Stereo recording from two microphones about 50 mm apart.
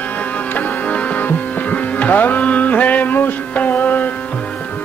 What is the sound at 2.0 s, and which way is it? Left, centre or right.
Music, left.